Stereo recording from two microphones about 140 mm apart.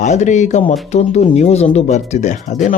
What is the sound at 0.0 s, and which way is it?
Speech, 60° left (ahead or behind).